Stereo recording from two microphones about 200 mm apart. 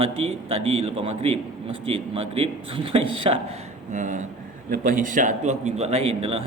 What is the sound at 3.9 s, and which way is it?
A man's voice, 40° right (ahead or behind).